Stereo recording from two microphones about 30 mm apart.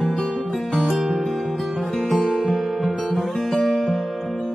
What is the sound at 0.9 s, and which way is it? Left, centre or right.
Music, centre.